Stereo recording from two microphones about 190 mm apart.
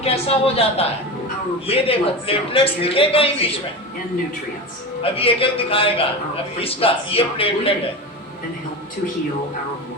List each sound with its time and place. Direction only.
0.0 s a woman's voice: 30° left (ahead or behind)
5.0 s a man's voice: 30° left (ahead or behind)